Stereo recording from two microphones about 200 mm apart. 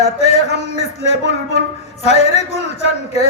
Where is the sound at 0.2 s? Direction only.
35° left (ahead or behind).